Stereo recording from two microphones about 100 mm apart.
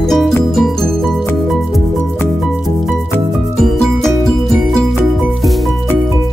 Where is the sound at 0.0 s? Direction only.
5° left (ahead or behind).